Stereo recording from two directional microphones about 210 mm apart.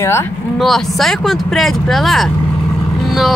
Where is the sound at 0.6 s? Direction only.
Centre (ahead or behind).